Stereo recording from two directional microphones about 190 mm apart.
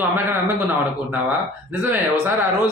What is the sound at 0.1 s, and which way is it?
Speech, 10° right (ahead or behind).